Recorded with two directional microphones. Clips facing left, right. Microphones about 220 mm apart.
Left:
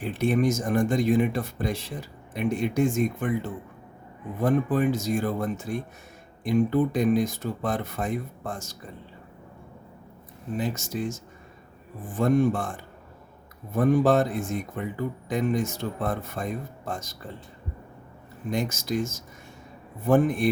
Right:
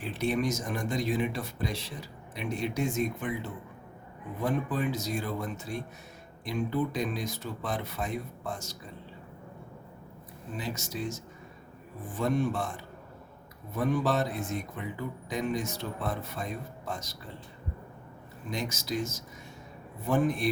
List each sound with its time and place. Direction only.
0.0 s speech: 50° left (ahead or behind)
10.6 s speech: 50° left (ahead or behind)
18.5 s speech: 50° left (ahead or behind)